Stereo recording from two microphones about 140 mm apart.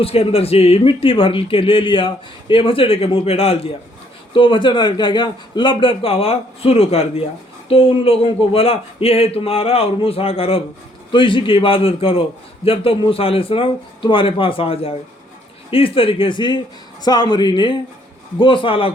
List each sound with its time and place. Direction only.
0.0 s a man's voice: 45° left (ahead or behind)